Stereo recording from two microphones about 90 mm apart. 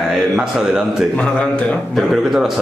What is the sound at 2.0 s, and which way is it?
Speech, centre (ahead or behind).